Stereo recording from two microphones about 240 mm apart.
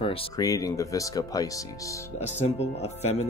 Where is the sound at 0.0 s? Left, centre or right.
Left.